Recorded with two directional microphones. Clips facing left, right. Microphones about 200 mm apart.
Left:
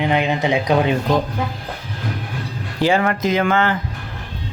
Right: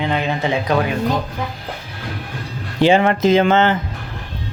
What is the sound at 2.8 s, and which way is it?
Speech, 20° right (ahead or behind).